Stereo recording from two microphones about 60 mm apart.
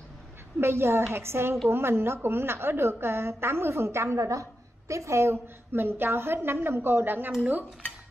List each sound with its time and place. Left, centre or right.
0.6 s a woman's voice: right